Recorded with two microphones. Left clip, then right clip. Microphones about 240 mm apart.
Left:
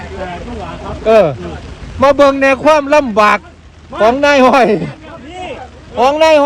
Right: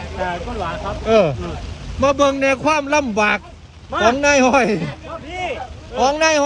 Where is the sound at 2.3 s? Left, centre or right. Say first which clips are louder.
Left 7 dB; left.